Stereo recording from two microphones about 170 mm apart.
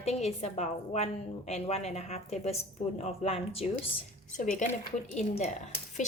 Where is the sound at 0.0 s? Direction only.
40° left (ahead or behind).